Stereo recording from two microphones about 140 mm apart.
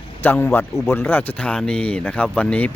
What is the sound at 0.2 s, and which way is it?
Speech, 15° left (ahead or behind).